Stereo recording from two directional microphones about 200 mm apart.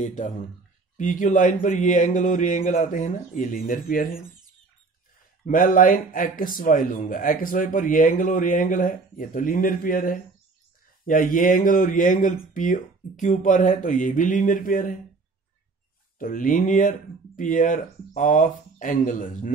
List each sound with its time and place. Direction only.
0.0 s speech: 40° left (ahead or behind)
5.4 s speech: 40° left (ahead or behind)
16.2 s speech: 45° left (ahead or behind)